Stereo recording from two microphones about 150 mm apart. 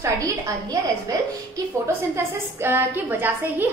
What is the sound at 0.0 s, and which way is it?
A woman's voice, 20° right (ahead or behind).